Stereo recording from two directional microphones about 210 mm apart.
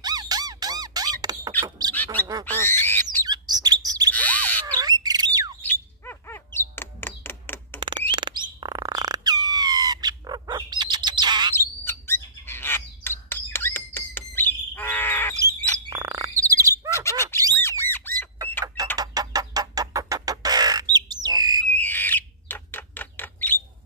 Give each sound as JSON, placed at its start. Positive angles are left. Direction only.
{"t": 0.0, "sound": "squeak", "side_deg": -20}
{"t": 2.4, "sound": "owl", "side_deg": 10}
{"t": 3.3, "sound": "bird", "side_deg": -20}
{"t": 4.1, "sound": "bird", "side_deg": 5}
{"t": 4.6, "sound": "squawk", "side_deg": -20}
{"t": 5.6, "sound": "bird", "side_deg": 10}
{"t": 8.1, "sound": "bird", "side_deg": -20}
{"t": 11.5, "sound": "bird", "side_deg": 10}
{"t": 15.3, "sound": "bird", "side_deg": -15}
{"t": 16.9, "sound": "bird", "side_deg": 15}
{"t": 17.6, "sound": "squawk", "side_deg": 10}
{"t": 18.9, "sound": "music", "side_deg": -15}
{"t": 21.7, "sound": "bird", "side_deg": 10}